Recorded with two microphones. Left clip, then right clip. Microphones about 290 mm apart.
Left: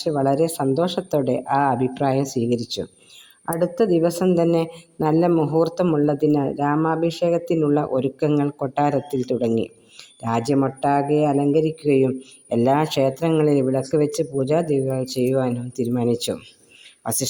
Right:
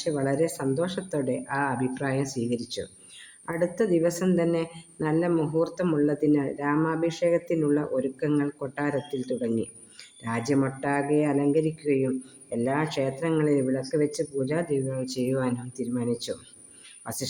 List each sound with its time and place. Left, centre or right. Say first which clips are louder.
0.0 s speech: left 6 dB; centre
0.3 s speech: left 7 dB; centre